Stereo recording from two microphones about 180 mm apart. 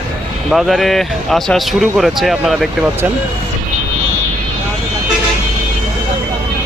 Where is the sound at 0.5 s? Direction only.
Centre (ahead or behind).